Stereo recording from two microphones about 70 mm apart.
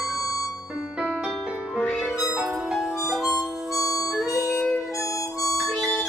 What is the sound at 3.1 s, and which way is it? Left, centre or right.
Harmonica, centre.